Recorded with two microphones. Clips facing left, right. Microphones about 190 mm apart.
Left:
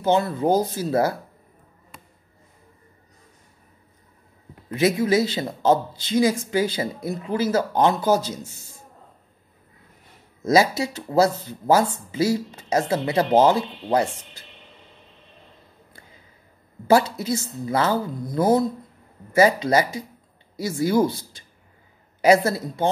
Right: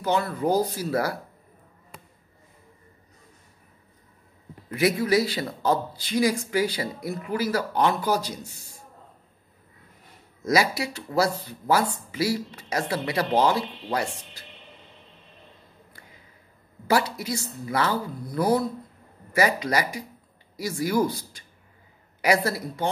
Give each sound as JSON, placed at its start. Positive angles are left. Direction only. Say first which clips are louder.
{"t": 0.0, "sound": "speech", "louder": "left 4 dB", "side_deg": 25}
{"t": 4.6, "sound": "speech", "louder": "left 3 dB", "side_deg": 25}
{"t": 10.4, "sound": "speech", "louder": "left 5 dB", "side_deg": 25}
{"t": 16.8, "sound": "speech", "louder": "left 6 dB", "side_deg": 25}